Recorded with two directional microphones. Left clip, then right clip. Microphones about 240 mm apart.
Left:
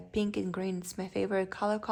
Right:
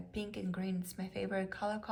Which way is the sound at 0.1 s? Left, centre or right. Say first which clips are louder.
Left 10 dB; left.